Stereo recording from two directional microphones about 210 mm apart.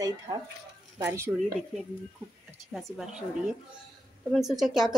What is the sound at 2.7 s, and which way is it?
Speech, centre (ahead or behind).